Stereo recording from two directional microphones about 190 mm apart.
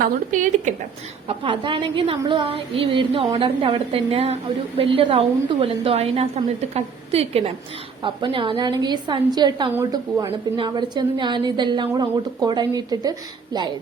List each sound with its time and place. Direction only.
0.3 s a woman's voice: 40° right (ahead or behind)
1.3 s a woman's voice: 25° right (ahead or behind)